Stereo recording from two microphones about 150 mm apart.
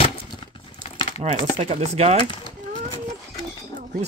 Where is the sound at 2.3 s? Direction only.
30° left (ahead or behind).